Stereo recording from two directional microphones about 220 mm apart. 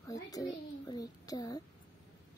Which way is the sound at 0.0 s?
15° left (ahead or behind).